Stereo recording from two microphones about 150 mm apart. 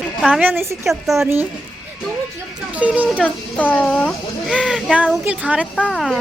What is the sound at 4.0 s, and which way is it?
Speech, centre (ahead or behind).